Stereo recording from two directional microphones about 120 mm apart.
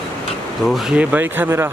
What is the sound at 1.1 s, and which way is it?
Speech, 15° right (ahead or behind).